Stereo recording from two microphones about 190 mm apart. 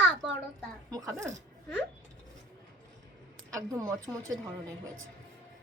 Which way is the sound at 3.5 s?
20° right (ahead or behind).